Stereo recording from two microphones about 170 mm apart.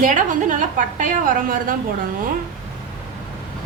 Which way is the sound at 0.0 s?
50° right (ahead or behind).